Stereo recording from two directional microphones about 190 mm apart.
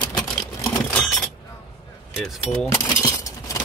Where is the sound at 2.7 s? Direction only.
15° left (ahead or behind).